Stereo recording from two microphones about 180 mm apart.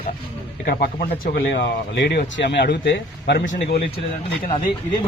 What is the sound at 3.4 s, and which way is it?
Speech, 40° left (ahead or behind).